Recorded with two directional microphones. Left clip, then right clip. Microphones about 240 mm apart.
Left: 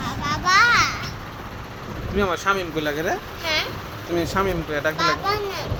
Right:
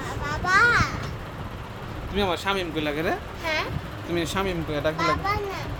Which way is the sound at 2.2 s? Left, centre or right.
Centre.